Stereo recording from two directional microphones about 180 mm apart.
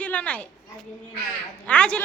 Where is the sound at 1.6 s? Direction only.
5° left (ahead or behind).